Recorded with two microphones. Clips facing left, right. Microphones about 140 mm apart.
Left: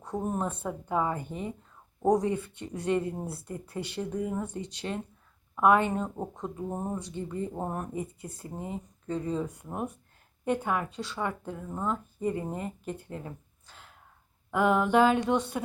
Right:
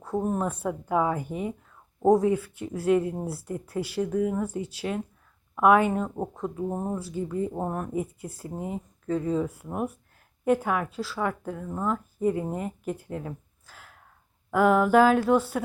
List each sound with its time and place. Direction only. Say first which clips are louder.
0.0 s speech: right 4 dB; centre (ahead or behind)
4.0 s speech: right 7 dB; 60° right (ahead or behind)
4.3 s speech: right 5 dB; 5° right (ahead or behind)